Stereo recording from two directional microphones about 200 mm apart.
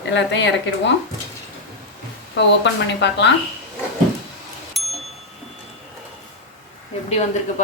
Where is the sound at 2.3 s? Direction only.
60° left (ahead or behind).